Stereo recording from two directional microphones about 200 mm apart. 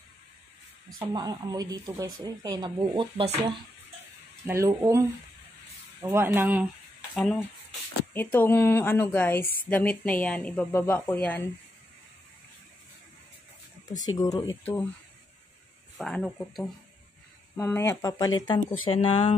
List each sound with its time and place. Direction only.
1.1 s speech: 20° right (ahead or behind)
4.5 s speech: 15° right (ahead or behind)
7.2 s speech: 5° left (ahead or behind)
14.0 s speech: 20° left (ahead or behind)
16.0 s speech: centre (ahead or behind); by 18.8 s 20° left (ahead or behind)